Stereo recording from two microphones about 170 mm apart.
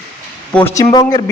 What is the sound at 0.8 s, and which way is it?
Speech, 25° left (ahead or behind).